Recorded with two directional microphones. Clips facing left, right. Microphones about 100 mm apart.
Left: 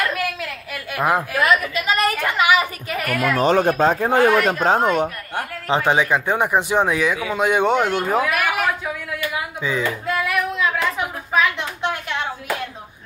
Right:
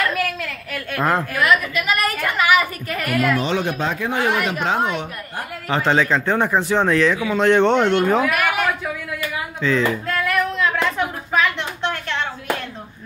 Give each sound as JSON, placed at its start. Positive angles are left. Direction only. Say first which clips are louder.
{"t": 0.1, "sound": "a sound", "louder": "right 1 dB", "side_deg": 5}
{"t": 1.4, "sound": "a woman's voice", "louder": "even", "side_deg": 30}
{"t": 2.9, "sound": "a woman's voice", "louder": "right 2 dB", "side_deg": 5}
{"t": 3.3, "sound": "speech", "louder": "left 5 dB", "side_deg": 45}
{"t": 5.7, "sound": "speech", "louder": "even", "side_deg": 15}
{"t": 9.6, "sound": "a sound", "louder": "right 5 dB", "side_deg": 10}